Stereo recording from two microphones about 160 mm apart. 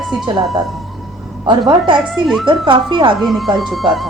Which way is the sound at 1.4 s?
30° right (ahead or behind).